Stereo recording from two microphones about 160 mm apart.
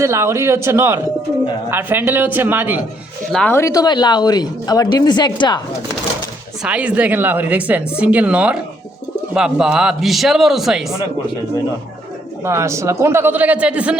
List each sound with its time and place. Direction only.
0.0 s speech: 15° right (ahead or behind)
3.3 s speech: 10° left (ahead or behind); by 5.6 s 25° left (ahead or behind)
6.6 s a man's voice: 5° right (ahead or behind)
12.5 s speech: 20° right (ahead or behind)